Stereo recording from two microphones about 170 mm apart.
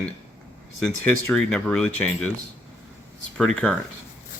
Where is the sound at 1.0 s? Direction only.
5° left (ahead or behind).